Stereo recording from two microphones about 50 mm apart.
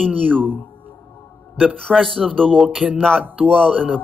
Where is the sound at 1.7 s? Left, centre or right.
Centre.